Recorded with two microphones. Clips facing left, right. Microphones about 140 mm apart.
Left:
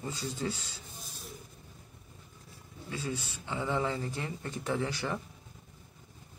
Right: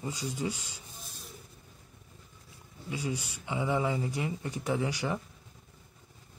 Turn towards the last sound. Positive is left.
turn(degrees=-15)  # may be behind; listen again after turning